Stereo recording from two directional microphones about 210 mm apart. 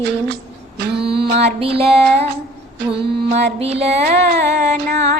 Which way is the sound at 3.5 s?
30° right (ahead or behind).